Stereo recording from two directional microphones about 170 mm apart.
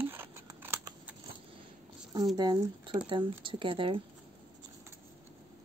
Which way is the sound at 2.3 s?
25° right (ahead or behind).